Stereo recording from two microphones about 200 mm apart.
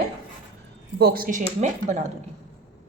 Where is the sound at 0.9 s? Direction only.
50° right (ahead or behind).